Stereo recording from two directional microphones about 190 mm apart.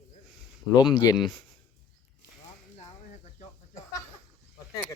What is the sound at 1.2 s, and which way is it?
Speech, centre (ahead or behind).